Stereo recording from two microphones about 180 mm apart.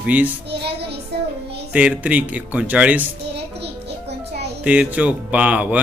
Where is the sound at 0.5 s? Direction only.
65° right (ahead or behind).